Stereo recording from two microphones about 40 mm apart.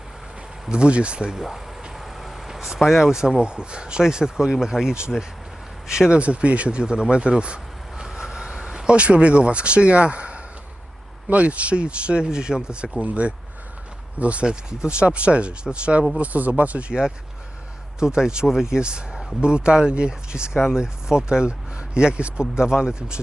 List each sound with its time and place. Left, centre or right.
0.7 s speech: right
1.3 s speech: centre
2.0 s vehicle: centre
3.0 s speech: centre
6.1 s speech: right
8.0 s vehicle: centre
9.0 s speech: right
14.4 s speech: right
18.0 s speech: centre